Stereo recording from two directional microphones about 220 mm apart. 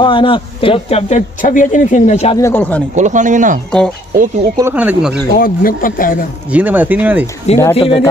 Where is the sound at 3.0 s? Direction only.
35° right (ahead or behind).